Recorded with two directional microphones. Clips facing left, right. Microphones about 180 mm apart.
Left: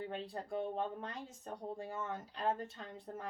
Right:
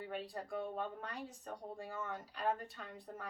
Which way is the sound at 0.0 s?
25° left (ahead or behind).